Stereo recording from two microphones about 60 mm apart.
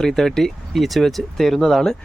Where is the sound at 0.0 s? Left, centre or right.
Centre.